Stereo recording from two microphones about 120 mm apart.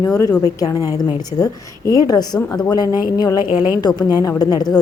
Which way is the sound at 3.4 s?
15° right (ahead or behind).